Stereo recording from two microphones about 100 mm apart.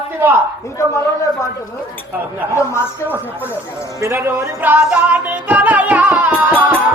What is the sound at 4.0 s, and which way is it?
Music, 25° right (ahead or behind).